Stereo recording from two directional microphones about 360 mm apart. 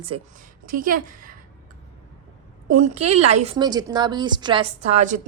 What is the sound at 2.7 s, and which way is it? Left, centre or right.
A woman's voice, centre.